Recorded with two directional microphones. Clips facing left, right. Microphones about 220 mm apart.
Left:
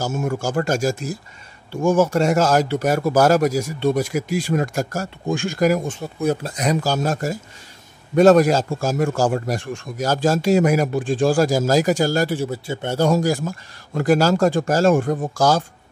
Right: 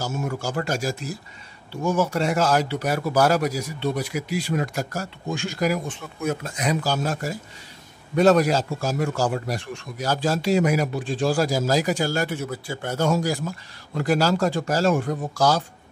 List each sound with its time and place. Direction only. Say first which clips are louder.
0.0 s a man's voice: left 5 dB; 50° left (ahead or behind)